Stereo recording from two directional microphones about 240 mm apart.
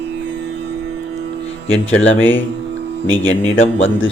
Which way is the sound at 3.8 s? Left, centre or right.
Left.